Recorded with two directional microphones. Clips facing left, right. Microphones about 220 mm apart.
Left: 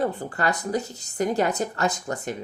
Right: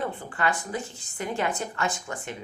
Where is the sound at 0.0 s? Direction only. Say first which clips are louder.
Left 4 dB; 40° left (ahead or behind).